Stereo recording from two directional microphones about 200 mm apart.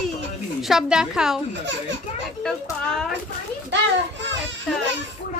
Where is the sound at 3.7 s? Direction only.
60° right (ahead or behind).